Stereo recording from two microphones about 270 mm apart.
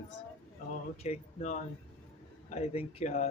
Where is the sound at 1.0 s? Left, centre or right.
Left.